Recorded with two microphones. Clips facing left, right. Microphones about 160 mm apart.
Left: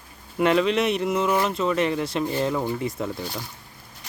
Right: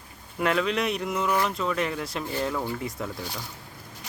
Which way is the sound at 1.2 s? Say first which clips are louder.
Left 1 dB; 20° left (ahead or behind).